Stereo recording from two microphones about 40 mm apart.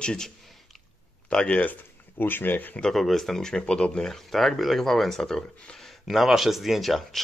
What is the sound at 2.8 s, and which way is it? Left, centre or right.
Speech, centre.